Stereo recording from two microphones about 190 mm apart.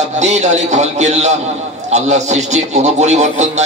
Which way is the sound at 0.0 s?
35° right (ahead or behind).